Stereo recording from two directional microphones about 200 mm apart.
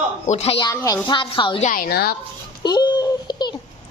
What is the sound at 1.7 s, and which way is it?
Speech, 50° left (ahead or behind).